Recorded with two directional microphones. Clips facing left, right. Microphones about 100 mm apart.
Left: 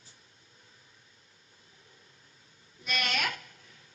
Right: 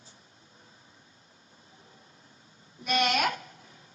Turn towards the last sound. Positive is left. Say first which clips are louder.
# right 6 dB
turn(degrees=-25)  # may be behind; listen again after turning